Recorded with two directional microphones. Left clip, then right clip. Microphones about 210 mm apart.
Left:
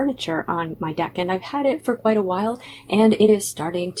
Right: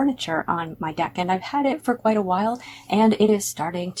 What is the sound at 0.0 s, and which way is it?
Speech, 25° right (ahead or behind).